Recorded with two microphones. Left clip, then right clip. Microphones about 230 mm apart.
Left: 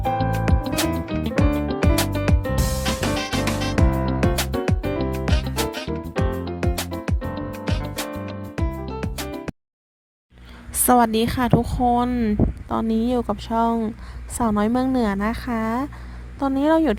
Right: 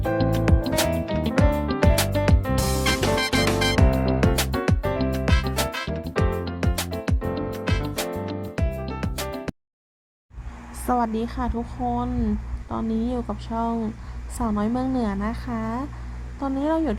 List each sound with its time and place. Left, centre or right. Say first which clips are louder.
0.2 s music: even; centre
10.8 s a woman's voice: left 7 dB; left
11.6 s speech: left 7 dB; left